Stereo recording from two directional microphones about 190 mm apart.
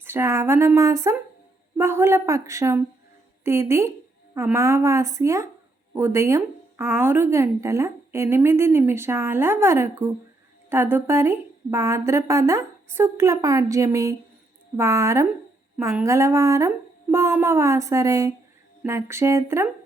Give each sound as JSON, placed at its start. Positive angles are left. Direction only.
{"t": 0.0, "sound": "a woman's voice", "side_deg": -10}